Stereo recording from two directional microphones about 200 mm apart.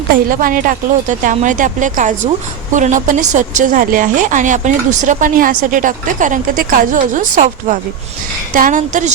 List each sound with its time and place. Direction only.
0.1 s a woman's voice: 45° right (ahead or behind)